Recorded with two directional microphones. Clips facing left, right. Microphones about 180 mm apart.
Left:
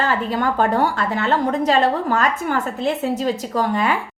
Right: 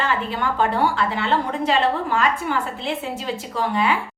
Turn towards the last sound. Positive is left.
turn(degrees=45)  # may be behind; listen again after turning